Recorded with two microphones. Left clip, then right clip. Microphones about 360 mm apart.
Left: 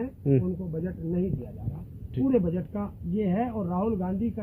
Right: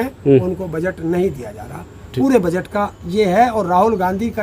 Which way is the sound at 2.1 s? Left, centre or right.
Centre.